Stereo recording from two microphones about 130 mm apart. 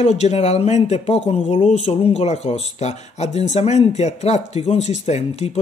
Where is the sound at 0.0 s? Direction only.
55° left (ahead or behind).